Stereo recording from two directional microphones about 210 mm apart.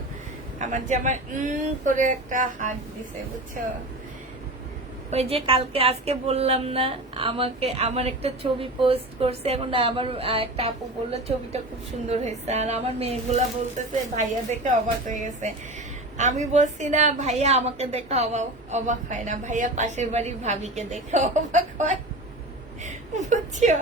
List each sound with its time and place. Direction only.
0.6 s a woman's voice: 35° right (ahead or behind)
5.1 s a woman's voice: 30° right (ahead or behind)
23.3 s a woman's voice: 35° right (ahead or behind)